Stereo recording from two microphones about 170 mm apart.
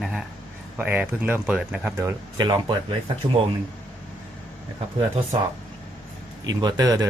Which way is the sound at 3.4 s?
35° right (ahead or behind).